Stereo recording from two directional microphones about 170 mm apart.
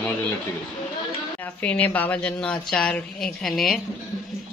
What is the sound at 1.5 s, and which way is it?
A man's voice, 10° left (ahead or behind).